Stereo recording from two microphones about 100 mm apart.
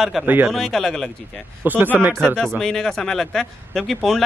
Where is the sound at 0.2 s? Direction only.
Centre (ahead or behind).